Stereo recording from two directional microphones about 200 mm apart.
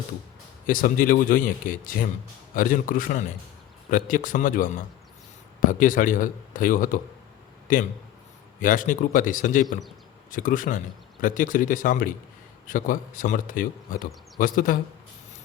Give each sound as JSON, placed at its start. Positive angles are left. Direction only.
{"t": 0.7, "sound": "a man's voice", "side_deg": 45}